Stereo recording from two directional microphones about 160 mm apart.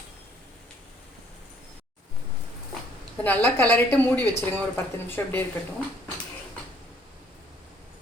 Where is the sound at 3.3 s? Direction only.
10° left (ahead or behind).